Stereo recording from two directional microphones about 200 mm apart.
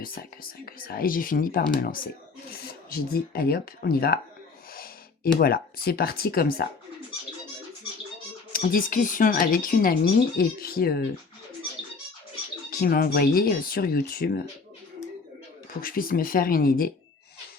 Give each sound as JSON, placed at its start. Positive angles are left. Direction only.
{"t": 0.0, "sound": "speech", "side_deg": 45}
{"t": 8.5, "sound": "speech", "side_deg": 45}
{"t": 12.7, "sound": "speech", "side_deg": 50}
{"t": 15.8, "sound": "speech", "side_deg": 45}